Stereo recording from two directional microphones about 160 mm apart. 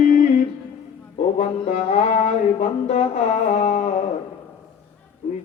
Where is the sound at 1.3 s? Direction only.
50° left (ahead or behind).